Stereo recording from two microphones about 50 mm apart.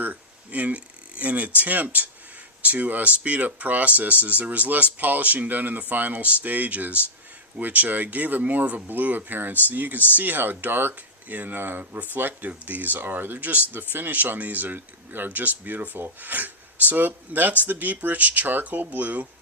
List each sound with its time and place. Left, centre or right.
0.0 s speech: right